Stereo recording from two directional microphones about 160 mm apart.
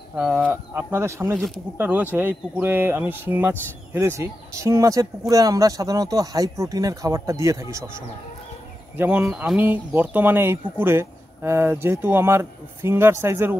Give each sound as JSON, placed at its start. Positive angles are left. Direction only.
{"t": 0.1, "sound": "speech", "side_deg": -10}
{"t": 1.3, "sound": "speech", "side_deg": 0}
{"t": 1.8, "sound": "speech", "side_deg": -10}
{"t": 8.9, "sound": "speech", "side_deg": -10}